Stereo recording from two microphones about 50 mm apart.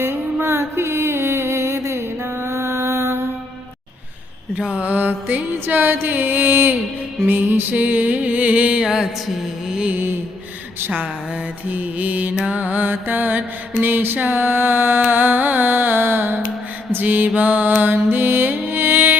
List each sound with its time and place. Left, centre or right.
0.0 s music: right
4.5 s mantra: right
8.8 s music: centre
9.9 s mantra: right
16.9 s music: right